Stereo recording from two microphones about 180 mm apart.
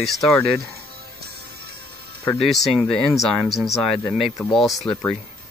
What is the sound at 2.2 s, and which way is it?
Speech, centre (ahead or behind).